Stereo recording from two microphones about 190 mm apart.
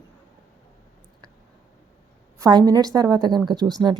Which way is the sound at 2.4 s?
20° right (ahead or behind).